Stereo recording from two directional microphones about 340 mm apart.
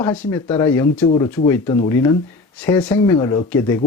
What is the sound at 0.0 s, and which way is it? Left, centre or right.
Speech, centre.